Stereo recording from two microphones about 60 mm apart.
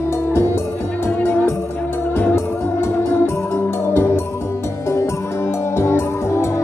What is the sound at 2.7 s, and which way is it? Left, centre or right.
Music, left.